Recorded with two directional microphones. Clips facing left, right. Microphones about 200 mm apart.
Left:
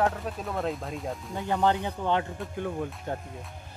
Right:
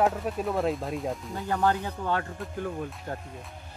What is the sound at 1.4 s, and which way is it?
Speech, 20° left (ahead or behind).